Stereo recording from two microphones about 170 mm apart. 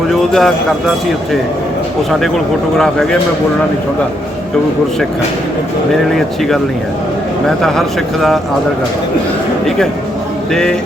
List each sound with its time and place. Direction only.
0.1 s speech: centre (ahead or behind)
2.7 s speech: 5° left (ahead or behind)
6.1 s speech: centre (ahead or behind)
10.5 s speech: 5° left (ahead or behind)